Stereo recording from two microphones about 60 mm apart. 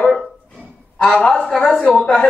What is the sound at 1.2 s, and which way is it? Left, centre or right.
Speech, centre.